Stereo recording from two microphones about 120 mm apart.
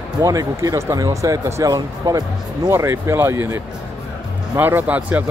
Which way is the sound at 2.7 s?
20° right (ahead or behind).